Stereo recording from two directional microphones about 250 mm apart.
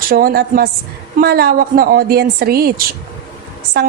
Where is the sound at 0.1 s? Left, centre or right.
Right.